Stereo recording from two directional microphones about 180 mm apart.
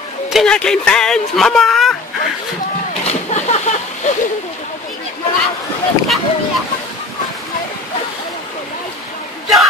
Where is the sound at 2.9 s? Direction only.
40° left (ahead or behind).